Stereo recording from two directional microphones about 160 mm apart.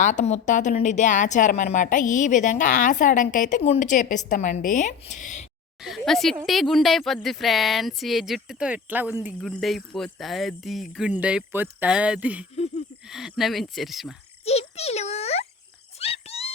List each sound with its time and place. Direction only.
0.0 s a woman's voice: 50° left (ahead or behind)
5.8 s speech: centre (ahead or behind)
9.4 s speech: centre (ahead or behind)
12.5 s wheeze: 40° left (ahead or behind)
13.1 s speech: centre (ahead or behind)
14.4 s a child's voice: 40° left (ahead or behind)
16.0 s a sound: 40° left (ahead or behind)